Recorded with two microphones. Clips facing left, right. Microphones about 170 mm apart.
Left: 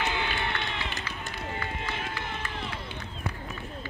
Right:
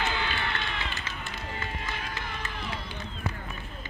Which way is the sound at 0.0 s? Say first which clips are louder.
Left 1 dB; 20° left (ahead or behind).